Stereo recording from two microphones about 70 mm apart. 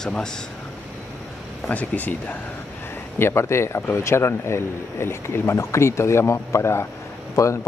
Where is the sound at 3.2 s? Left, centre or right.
Left.